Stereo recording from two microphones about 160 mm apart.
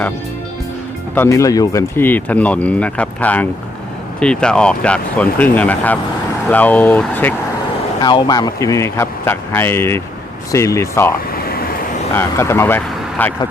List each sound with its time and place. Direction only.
1.1 s speech: 15° left (ahead or behind)
8.0 s speech: 30° left (ahead or behind)
12.1 s speech: 15° left (ahead or behind)